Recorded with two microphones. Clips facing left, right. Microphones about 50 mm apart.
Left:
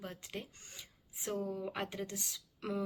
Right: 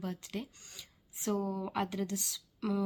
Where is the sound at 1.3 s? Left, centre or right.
Right.